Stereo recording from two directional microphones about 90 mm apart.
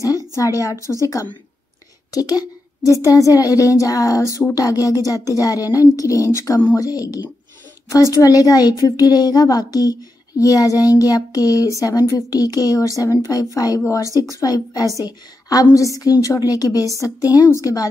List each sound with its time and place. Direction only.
0.4 s a woman's voice: 40° left (ahead or behind)
2.1 s a woman's voice: 45° left (ahead or behind)
14.3 s a woman's voice: 45° left (ahead or behind)